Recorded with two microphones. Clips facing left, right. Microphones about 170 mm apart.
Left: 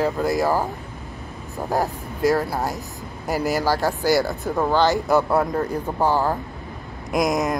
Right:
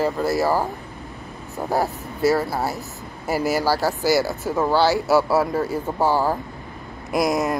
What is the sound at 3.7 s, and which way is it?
Speech, 10° right (ahead or behind).